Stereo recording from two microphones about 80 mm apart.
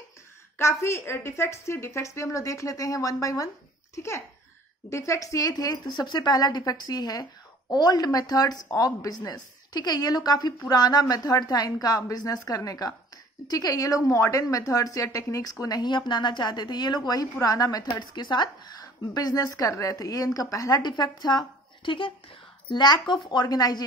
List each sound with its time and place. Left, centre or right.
0.6 s a woman's voice: left
15.6 s a woman's voice: left
20.8 s speech: left
22.7 s speech: left
23.4 s a woman's voice: left